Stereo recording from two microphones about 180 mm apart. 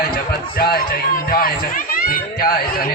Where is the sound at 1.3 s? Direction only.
50° left (ahead or behind).